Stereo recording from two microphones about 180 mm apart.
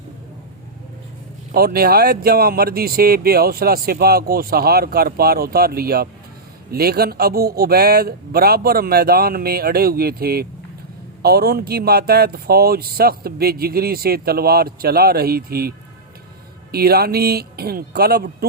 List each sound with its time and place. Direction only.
1.5 s speech: 60° right (ahead or behind)
16.7 s speech: 60° right (ahead or behind)